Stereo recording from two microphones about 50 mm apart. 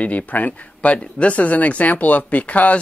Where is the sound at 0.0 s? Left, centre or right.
Left.